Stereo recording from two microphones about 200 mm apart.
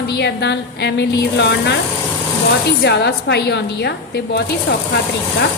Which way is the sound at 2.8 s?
60° left (ahead or behind).